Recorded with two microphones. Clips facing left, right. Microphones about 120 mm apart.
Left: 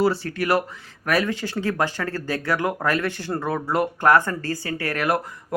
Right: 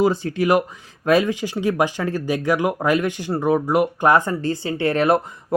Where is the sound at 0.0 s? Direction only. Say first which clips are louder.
Right 3 dB; 20° right (ahead or behind).